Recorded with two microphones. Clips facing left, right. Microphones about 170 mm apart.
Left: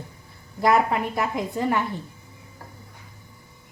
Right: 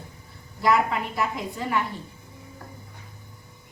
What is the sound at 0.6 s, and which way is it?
A woman's voice, 50° left (ahead or behind).